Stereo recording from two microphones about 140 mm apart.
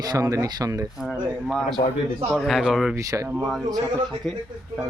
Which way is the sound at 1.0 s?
5° right (ahead or behind).